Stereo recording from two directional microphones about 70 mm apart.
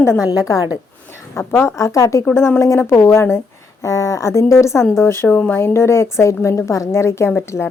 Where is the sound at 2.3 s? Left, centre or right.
Left.